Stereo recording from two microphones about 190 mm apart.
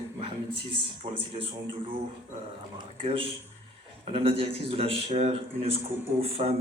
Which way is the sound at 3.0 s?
30° right (ahead or behind).